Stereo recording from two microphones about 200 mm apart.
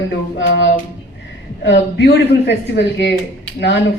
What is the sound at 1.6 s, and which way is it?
Speech, 60° left (ahead or behind).